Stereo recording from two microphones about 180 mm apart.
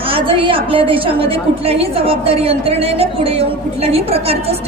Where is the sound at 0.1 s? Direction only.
30° right (ahead or behind).